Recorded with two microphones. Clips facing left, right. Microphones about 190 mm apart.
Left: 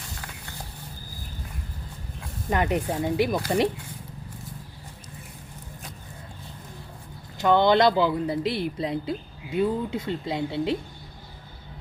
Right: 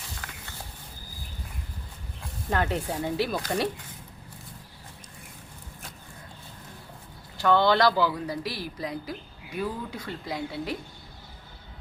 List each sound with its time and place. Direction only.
2.5 s speech: 15° left (ahead or behind)
7.3 s speech: 20° left (ahead or behind)